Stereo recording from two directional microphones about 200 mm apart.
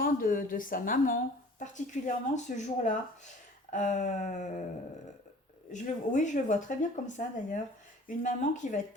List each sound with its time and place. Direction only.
0.0 s a woman's voice: 45° left (ahead or behind)
5.7 s speech: 40° left (ahead or behind)